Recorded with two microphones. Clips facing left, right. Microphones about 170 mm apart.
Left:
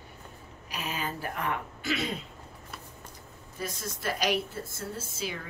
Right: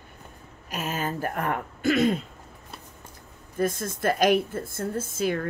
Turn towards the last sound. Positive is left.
turn(degrees=-50)  # may be behind; listen again after turning